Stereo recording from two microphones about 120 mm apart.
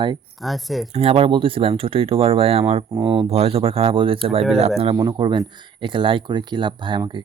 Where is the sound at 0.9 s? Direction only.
55° right (ahead or behind).